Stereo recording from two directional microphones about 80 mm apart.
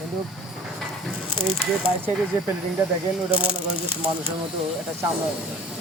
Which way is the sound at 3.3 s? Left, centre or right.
Left.